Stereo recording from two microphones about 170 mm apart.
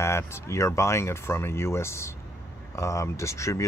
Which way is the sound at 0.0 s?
15° left (ahead or behind).